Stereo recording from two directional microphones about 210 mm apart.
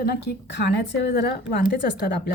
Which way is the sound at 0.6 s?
55° left (ahead or behind).